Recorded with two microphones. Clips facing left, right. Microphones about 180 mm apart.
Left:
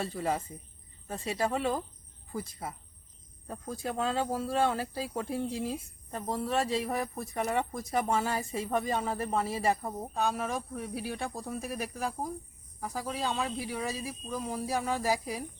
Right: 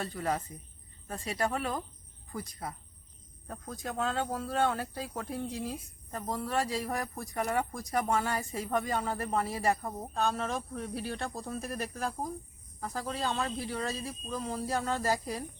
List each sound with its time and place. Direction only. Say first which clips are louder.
0.0 s speech: left 1 dB; 25° left (ahead or behind)
3.4 s speech: left 3 dB; 20° left (ahead or behind)
6.2 s speech: left 2 dB; centre (ahead or behind)
6.5 s speech: left 2 dB; 25° left (ahead or behind)
6.8 s speech: left 2 dB; centre (ahead or behind)
8.3 s speech: left 1 dB; 25° left (ahead or behind)
9.0 s speech: left 1 dB; centre (ahead or behind)
9.5 s speech: left 1 dB; 25° left (ahead or behind)
9.8 s speech: even; 10° left (ahead or behind)